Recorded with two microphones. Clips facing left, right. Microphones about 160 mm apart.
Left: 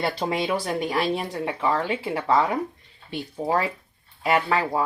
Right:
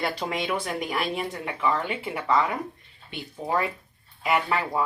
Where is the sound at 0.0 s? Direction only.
30° left (ahead or behind).